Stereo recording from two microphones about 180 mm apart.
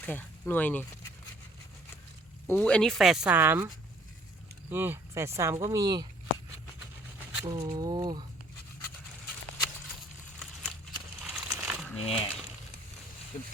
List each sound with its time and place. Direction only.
0.0 s speech: 10° left (ahead or behind)
2.5 s speech: 5° left (ahead or behind); by 3.7 s 10° right (ahead or behind)
4.7 s speech: 10° right (ahead or behind)
7.4 s speech: 20° right (ahead or behind)
10.4 s a sound: 5° left (ahead or behind)
11.5 s crumpling: 10° right (ahead or behind)
11.9 s speech: 30° left (ahead or behind)
13.3 s speech: 40° left (ahead or behind)